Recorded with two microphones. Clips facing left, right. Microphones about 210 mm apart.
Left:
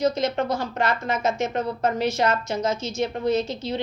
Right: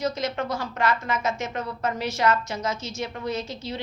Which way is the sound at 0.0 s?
20° left (ahead or behind).